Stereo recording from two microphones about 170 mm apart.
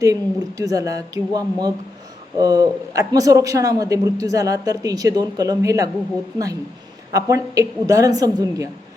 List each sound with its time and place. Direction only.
0.0 s a man's voice: 20° right (ahead or behind)
7.1 s a man's voice: 20° right (ahead or behind)